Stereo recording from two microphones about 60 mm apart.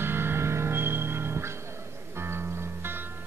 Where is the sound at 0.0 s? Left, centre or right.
Right.